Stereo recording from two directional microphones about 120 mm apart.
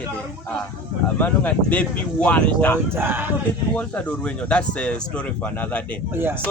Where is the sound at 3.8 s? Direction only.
10° left (ahead or behind).